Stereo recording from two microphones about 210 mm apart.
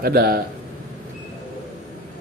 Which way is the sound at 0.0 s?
45° right (ahead or behind).